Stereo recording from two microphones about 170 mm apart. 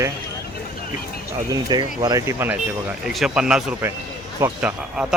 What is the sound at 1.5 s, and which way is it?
Speech, 25° right (ahead or behind).